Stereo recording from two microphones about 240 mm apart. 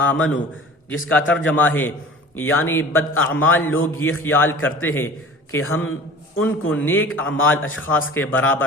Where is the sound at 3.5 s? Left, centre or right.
Centre.